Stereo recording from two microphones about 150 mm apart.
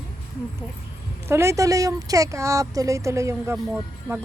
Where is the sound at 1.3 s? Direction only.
20° right (ahead or behind).